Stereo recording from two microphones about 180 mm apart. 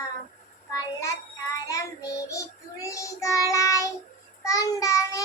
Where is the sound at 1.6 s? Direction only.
20° left (ahead or behind).